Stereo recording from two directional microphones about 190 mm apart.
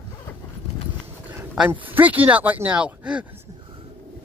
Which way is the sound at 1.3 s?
10° right (ahead or behind).